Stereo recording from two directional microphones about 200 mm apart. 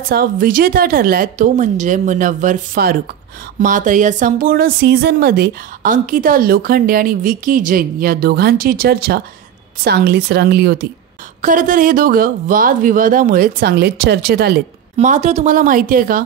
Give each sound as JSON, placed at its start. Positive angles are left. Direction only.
{"t": 0.1, "sound": "speech", "side_deg": -45}
{"t": 11.4, "sound": "speech", "side_deg": -40}
{"t": 15.0, "sound": "speech", "side_deg": -35}